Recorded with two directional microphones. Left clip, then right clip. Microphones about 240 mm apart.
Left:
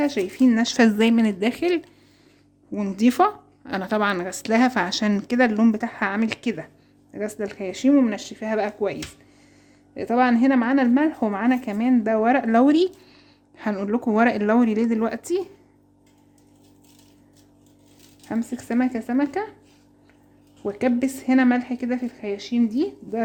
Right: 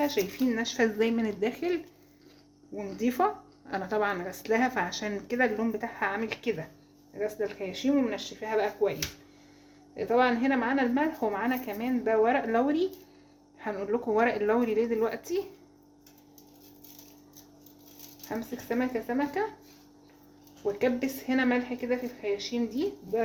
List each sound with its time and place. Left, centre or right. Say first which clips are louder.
0.0 s speech: left 7 dB; left
18.3 s speech: left 5 dB; left
20.7 s speech: left 5 dB; left